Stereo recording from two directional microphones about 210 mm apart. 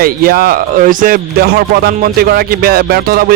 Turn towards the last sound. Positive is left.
turn(degrees=-45)  # may be behind; listen again after turning